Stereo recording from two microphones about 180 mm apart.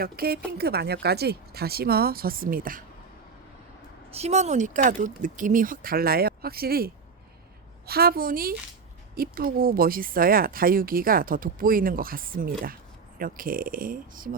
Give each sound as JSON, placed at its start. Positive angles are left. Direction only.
{"t": 0.0, "sound": "speech", "side_deg": -60}
{"t": 4.1, "sound": "speech", "side_deg": -35}